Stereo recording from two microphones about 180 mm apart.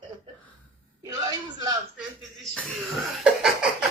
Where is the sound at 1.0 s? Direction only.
25° right (ahead or behind).